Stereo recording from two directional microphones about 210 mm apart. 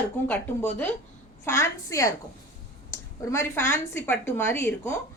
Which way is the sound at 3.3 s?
10° left (ahead or behind).